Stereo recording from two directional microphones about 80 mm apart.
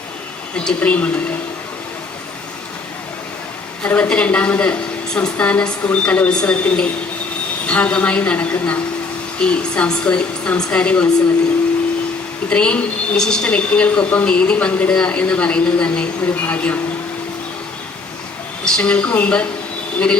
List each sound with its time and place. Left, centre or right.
0.5 s a woman's voice: centre
3.8 s a woman's voice: centre
12.5 s a woman's voice: centre
18.6 s a woman's voice: centre